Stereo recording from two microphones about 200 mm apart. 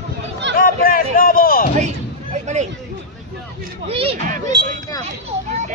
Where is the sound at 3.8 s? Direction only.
30° right (ahead or behind).